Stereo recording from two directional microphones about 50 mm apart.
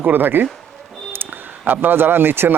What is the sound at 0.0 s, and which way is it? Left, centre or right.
Speech, right.